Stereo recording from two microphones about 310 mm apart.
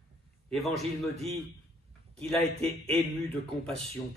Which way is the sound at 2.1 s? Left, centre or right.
Centre.